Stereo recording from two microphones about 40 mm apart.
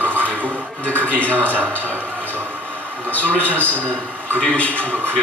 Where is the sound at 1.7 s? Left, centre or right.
Left.